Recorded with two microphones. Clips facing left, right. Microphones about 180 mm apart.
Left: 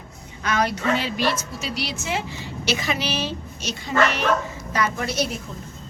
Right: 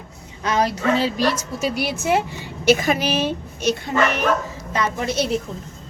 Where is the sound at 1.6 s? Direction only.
50° right (ahead or behind).